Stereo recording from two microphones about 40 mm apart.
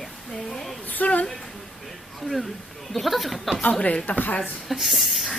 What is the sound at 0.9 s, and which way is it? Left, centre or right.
Speech, left.